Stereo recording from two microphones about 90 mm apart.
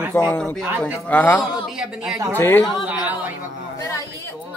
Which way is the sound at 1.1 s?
20° left (ahead or behind).